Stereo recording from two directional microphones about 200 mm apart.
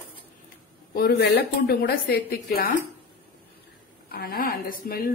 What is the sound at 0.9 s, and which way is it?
A woman's voice, 50° left (ahead or behind).